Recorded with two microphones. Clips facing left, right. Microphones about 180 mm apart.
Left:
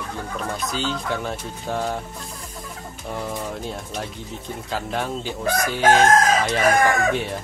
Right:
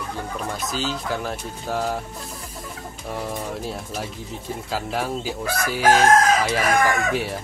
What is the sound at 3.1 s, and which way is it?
Speech, 5° right (ahead or behind).